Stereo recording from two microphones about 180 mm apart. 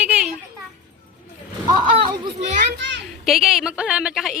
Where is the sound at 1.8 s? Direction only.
25° right (ahead or behind).